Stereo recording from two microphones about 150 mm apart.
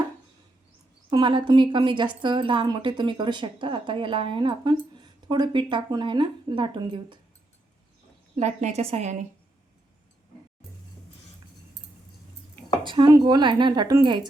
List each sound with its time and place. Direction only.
1.1 s speech: 30° right (ahead or behind)
8.4 s a woman's voice: 50° right (ahead or behind)
12.8 s speech: 30° right (ahead or behind)